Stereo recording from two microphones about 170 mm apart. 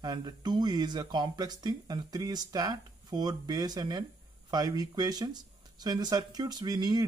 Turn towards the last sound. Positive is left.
turn(degrees=-25)  # may be behind; listen again after turning